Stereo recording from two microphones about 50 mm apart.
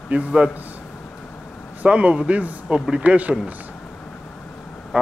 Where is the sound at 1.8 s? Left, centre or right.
Right.